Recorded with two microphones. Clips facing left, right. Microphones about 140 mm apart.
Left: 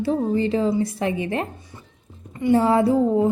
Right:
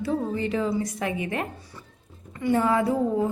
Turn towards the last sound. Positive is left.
turn(degrees=25)  # may be behind; listen again after turning